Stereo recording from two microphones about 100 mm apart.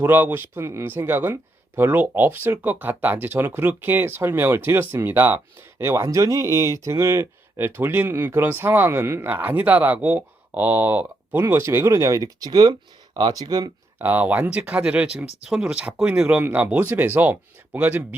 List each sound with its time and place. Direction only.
0.0 s speech: 20° right (ahead or behind); by 13.7 s 40° right (ahead or behind)
14.0 s speech: 15° right (ahead or behind)